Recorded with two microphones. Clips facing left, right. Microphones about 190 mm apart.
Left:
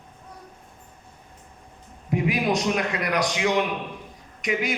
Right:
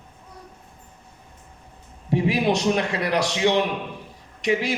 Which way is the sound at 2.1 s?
30° right (ahead or behind).